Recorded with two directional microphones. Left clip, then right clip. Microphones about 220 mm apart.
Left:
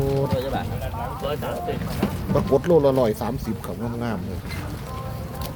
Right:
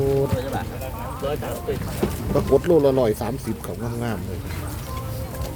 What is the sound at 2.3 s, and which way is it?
Speech, centre (ahead or behind).